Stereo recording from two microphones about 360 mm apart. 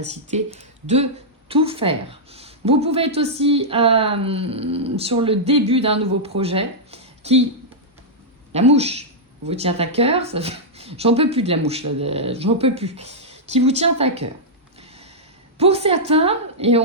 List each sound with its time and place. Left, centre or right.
0.0 s speech: centre
8.5 s speech: centre
15.5 s speech: centre